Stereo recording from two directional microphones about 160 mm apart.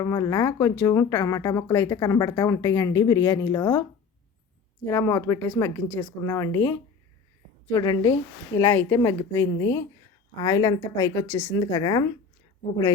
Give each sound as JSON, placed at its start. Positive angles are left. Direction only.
{"t": 0.0, "sound": "speech", "side_deg": 20}
{"t": 4.9, "sound": "speech", "side_deg": 15}
{"t": 6.2, "sound": "speech", "side_deg": 20}
{"t": 8.5, "sound": "speech", "side_deg": 15}